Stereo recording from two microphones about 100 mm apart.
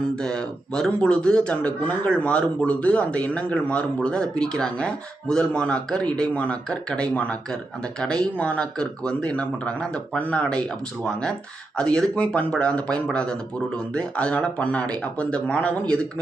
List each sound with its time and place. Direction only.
0.2 s speech: 5° left (ahead or behind)